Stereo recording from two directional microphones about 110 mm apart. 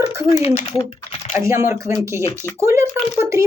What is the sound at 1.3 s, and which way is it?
Speech, 25° right (ahead or behind).